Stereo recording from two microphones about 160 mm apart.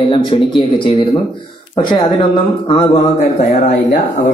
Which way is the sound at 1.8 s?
25° left (ahead or behind).